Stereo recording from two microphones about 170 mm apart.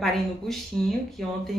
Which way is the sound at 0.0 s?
Centre (ahead or behind).